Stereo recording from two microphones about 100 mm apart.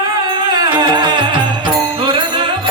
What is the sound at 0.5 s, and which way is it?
Music, 45° right (ahead or behind).